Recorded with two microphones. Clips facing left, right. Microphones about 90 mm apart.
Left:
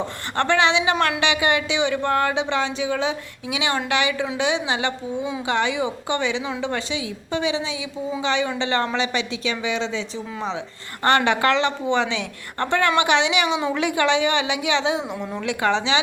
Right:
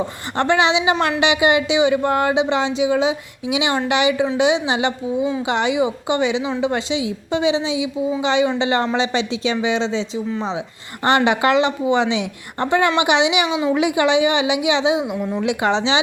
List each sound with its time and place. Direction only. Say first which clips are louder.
0.3 s speech: right 2 dB; 15° right (ahead or behind)
15.4 s speech: right 2 dB; 20° right (ahead or behind)